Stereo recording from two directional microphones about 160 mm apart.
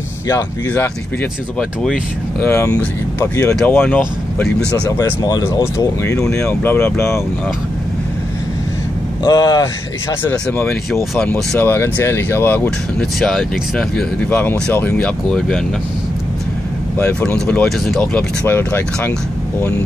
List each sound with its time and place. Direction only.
0.3 s speech: 20° left (ahead or behind)
1.6 s speech: 5° left (ahead or behind)
2.4 s speech: 15° left (ahead or behind)
5.2 s speech: 20° left (ahead or behind)
9.2 s speech: 25° left (ahead or behind)
10.2 s speech: 15° left (ahead or behind)
11.5 s speech: 15° left (ahead or behind)
13.2 s speech: centre (ahead or behind)
17.0 s speech: 10° left (ahead or behind)